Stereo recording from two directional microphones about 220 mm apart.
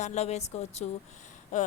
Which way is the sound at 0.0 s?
30° left (ahead or behind).